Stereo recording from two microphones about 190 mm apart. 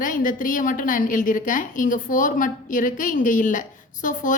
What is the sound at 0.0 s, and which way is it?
A woman's voice, 45° left (ahead or behind).